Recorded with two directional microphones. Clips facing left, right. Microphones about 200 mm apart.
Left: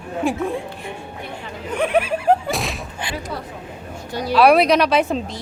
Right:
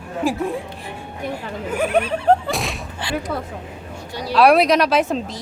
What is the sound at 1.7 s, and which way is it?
A woman's voice, centre (ahead or behind).